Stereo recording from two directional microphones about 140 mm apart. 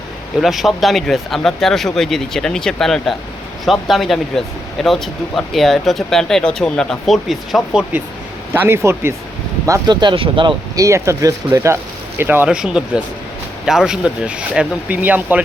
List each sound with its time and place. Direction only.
0.4 s speech: centre (ahead or behind)
8.6 s speech: 20° right (ahead or behind); by 10.5 s 35° right (ahead or behind)
10.8 s speech: 20° right (ahead or behind)